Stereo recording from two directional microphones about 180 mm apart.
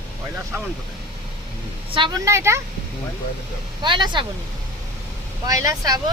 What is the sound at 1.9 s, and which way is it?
Speech, 25° right (ahead or behind).